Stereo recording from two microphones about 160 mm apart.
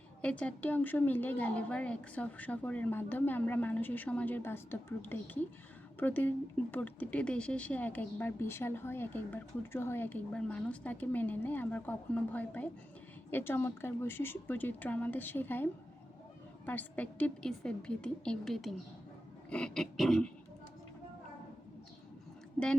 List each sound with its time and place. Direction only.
0.2 s a woman's voice: 10° left (ahead or behind)